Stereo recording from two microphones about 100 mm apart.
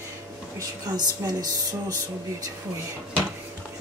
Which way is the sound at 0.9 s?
40° right (ahead or behind).